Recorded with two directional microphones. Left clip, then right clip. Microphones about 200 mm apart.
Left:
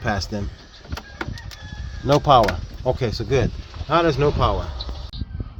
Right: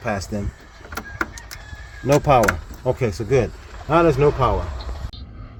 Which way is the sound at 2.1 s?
10° left (ahead or behind).